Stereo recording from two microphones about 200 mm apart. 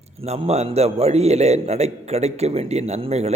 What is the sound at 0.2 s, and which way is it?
A man's voice, 30° right (ahead or behind).